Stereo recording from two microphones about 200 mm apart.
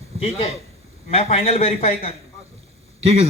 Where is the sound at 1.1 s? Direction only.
30° left (ahead or behind).